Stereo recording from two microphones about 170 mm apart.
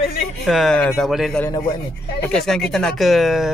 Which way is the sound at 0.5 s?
Centre (ahead or behind).